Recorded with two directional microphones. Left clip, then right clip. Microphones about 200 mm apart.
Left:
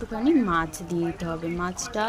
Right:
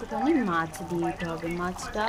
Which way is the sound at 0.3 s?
20° left (ahead or behind).